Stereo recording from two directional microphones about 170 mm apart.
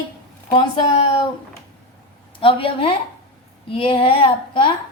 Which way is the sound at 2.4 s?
30° left (ahead or behind).